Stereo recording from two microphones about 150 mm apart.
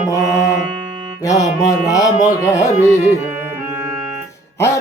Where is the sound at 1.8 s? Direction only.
25° left (ahead or behind).